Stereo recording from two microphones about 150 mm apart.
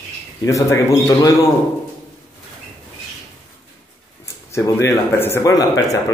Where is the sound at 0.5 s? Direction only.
20° left (ahead or behind).